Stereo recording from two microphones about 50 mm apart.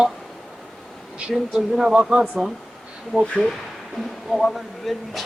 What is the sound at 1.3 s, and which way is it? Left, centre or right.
Speech, centre.